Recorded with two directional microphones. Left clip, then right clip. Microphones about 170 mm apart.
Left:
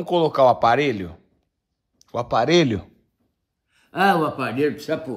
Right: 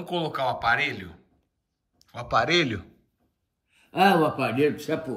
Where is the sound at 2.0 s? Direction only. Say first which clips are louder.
Left 12 dB; 35° left (ahead or behind).